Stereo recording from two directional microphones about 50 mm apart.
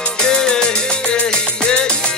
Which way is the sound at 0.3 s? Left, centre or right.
Centre.